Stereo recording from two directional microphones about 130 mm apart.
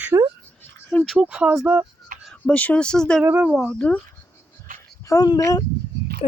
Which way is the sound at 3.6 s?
10° left (ahead or behind).